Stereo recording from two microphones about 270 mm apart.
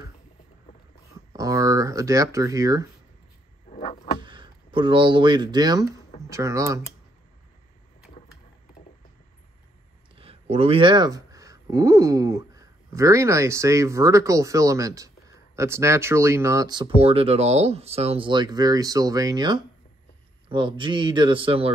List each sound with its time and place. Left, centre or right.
1.3 s speech: centre
3.7 s a sound: left
4.2 s speech: centre
10.1 s speech: right